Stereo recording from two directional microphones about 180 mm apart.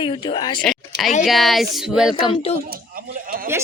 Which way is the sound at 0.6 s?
Centre (ahead or behind).